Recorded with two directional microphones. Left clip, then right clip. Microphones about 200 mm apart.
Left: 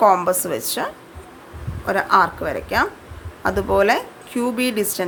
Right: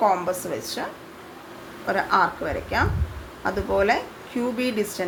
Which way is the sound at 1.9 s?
25° left (ahead or behind).